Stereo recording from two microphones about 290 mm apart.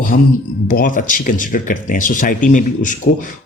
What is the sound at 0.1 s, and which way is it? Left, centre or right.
Speech, left.